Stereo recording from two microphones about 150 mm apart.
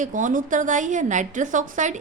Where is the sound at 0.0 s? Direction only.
60° right (ahead or behind).